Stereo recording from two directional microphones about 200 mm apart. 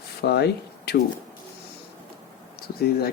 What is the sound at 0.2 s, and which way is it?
Speech, 55° left (ahead or behind).